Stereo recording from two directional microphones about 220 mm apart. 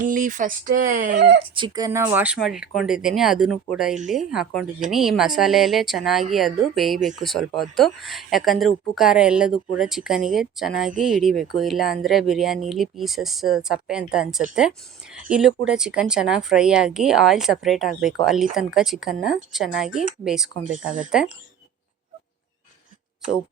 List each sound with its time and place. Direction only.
0.0 s speech: 35° right (ahead or behind)
1.1 s speech: 50° right (ahead or behind)
1.5 s speech: 20° right (ahead or behind); by 20.9 s 5° right (ahead or behind)